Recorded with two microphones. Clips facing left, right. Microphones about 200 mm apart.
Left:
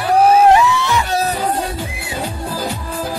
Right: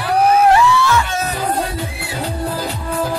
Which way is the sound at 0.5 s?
20° left (ahead or behind).